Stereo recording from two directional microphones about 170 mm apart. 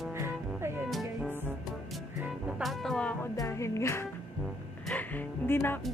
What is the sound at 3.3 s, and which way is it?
Music, 15° left (ahead or behind).